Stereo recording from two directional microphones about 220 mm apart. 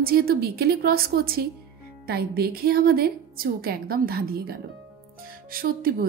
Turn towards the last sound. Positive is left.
turn(degrees=-40)  # may be behind; listen again after turning